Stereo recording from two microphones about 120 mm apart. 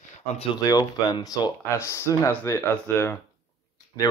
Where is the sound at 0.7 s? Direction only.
30° left (ahead or behind).